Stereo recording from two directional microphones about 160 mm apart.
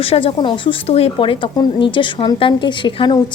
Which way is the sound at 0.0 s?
35° left (ahead or behind).